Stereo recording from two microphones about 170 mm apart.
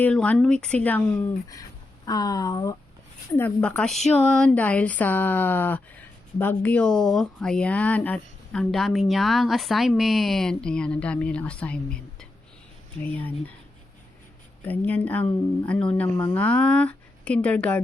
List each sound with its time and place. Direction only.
0.0 s speech: 5° left (ahead or behind)
2.0 s speech: 20° left (ahead or behind)
3.3 s speech: 10° left (ahead or behind)
14.6 s speech: 10° left (ahead or behind)